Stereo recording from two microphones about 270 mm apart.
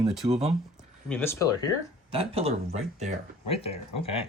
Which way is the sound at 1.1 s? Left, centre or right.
Centre.